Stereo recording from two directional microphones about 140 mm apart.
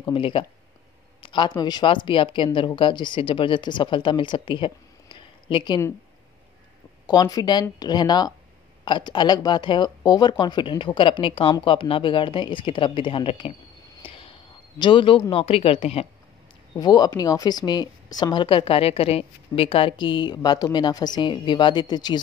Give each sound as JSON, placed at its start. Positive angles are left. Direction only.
{"t": 0.0, "sound": "speech", "side_deg": 40}
{"t": 7.1, "sound": "speech", "side_deg": 25}
{"t": 14.0, "sound": "vehicle", "side_deg": 40}
{"t": 14.8, "sound": "a man's voice", "side_deg": 35}
{"t": 16.7, "sound": "speech", "side_deg": 30}